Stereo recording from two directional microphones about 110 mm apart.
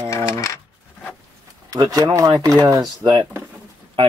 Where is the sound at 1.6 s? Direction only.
35° right (ahead or behind).